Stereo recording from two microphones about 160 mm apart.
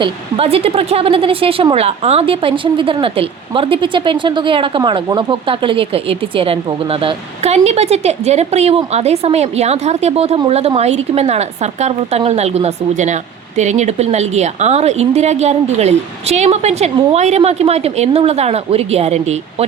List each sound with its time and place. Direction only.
0.0 s a woman's voice: 35° right (ahead or behind)